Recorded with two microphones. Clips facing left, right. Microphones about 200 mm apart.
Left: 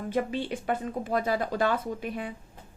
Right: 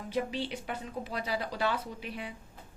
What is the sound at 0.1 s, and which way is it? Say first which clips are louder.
A woman's voice: left 3 dB; 50° left (ahead or behind).